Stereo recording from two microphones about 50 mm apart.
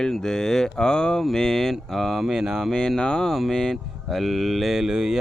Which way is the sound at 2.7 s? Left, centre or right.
Centre.